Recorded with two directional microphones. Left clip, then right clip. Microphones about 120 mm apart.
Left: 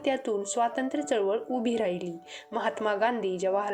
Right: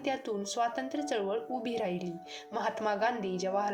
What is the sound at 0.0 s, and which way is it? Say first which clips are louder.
A woman's voice: left 5 dB; 40° left (ahead or behind).